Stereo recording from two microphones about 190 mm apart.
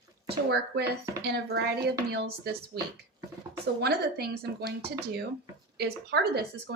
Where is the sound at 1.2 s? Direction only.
60° right (ahead or behind).